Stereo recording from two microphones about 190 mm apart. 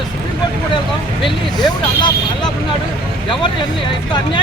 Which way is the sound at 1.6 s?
20° left (ahead or behind).